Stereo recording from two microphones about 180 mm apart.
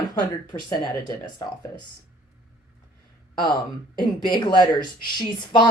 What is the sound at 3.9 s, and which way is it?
A woman's voice, 25° left (ahead or behind).